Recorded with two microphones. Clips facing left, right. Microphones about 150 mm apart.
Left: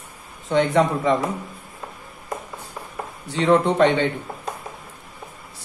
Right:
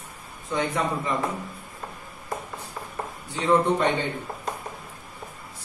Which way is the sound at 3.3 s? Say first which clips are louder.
Left 4 dB; 85° left.